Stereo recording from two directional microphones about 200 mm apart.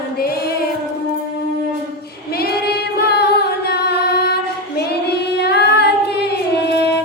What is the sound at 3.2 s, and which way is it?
Female singing, 55° left (ahead or behind).